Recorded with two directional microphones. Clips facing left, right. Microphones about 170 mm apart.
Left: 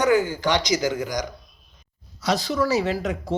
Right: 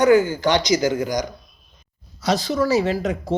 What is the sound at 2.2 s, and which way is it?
Speech, 25° right (ahead or behind).